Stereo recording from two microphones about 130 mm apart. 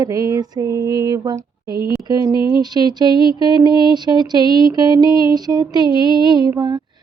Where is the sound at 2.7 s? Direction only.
30° right (ahead or behind).